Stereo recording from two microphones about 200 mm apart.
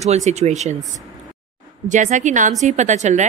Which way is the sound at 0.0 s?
35° right (ahead or behind).